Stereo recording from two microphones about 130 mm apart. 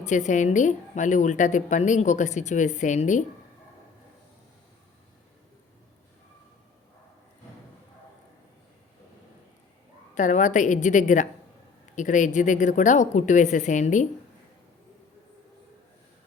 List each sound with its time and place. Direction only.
0.0 s a woman's voice: 70° left (ahead or behind)
10.2 s a woman's voice: 70° left (ahead or behind)